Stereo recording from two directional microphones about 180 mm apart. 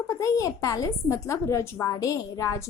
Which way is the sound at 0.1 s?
20° left (ahead or behind).